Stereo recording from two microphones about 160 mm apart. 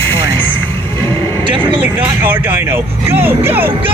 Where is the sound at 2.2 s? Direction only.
10° right (ahead or behind).